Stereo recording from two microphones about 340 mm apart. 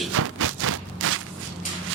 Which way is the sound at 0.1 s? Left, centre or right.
Right.